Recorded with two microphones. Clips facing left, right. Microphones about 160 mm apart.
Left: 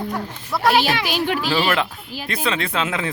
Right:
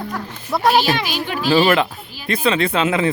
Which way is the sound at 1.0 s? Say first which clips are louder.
Left 2 dB; 65° left (ahead or behind).